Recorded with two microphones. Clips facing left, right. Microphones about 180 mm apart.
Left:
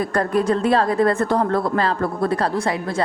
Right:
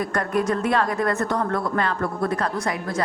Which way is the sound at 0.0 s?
30° left (ahead or behind).